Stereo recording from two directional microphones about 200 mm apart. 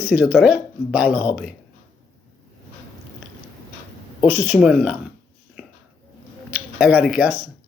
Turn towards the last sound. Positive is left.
turn(degrees=-10)  # may be behind; listen again after turning